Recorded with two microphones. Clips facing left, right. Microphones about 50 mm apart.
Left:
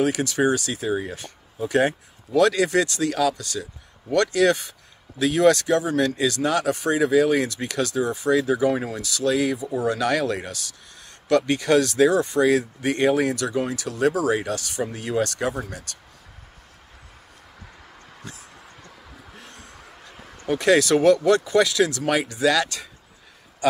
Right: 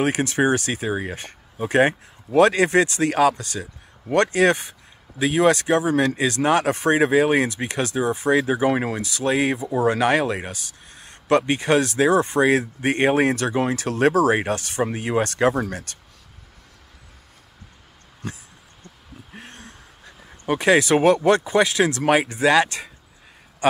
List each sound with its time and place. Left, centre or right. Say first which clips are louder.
0.0 s speech: right 1 dB; right
5.2 s speech: even; right
9.0 s speech: left 2 dB; right
15.4 s speech: right 7 dB; right
18.2 s a sound: right 7 dB; right
20.6 s speech: even; right
23.6 s speech: right 2 dB; right